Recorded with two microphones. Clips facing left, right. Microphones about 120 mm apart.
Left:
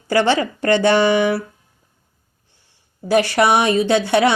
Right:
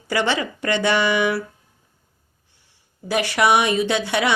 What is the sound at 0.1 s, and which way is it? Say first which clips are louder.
A woman's voice: left 5 dB; 35° left (ahead or behind).